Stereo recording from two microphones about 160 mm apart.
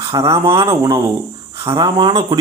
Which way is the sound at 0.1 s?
20° right (ahead or behind).